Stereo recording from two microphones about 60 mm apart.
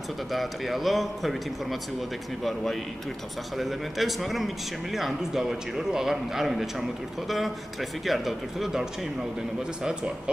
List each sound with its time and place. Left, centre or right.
0.3 s a man's voice: centre